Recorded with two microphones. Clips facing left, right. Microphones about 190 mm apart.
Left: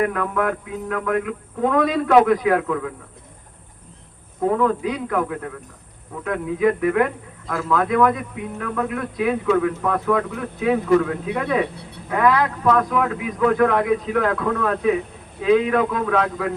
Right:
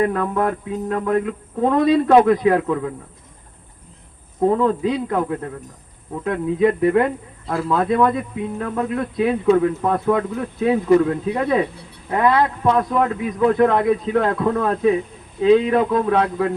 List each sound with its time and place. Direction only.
0.0 s speech: 30° right (ahead or behind)
4.4 s speech: 30° right (ahead or behind)